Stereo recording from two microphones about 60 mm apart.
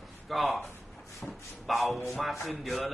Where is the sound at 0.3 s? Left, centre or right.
Centre.